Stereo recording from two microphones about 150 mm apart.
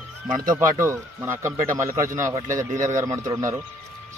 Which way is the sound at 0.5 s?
25° right (ahead or behind).